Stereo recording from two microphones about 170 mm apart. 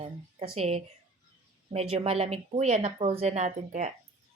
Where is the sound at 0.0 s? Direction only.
35° right (ahead or behind).